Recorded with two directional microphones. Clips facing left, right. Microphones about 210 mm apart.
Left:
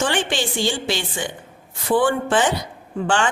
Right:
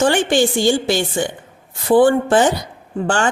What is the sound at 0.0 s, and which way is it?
A woman's voice, 45° right (ahead or behind).